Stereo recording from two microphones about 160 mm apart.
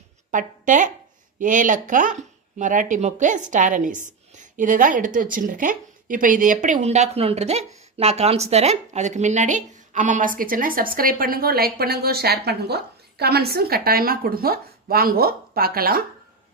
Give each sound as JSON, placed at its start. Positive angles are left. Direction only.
{"t": 0.3, "sound": "a woman's voice", "side_deg": -55}